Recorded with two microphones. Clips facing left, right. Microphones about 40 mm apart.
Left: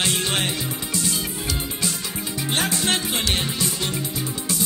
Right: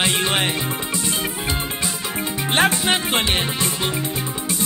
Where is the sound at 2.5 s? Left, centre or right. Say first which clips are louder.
Right 5 dB; right.